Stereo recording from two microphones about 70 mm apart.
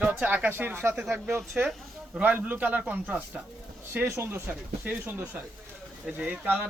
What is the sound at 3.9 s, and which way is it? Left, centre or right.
Speech, right.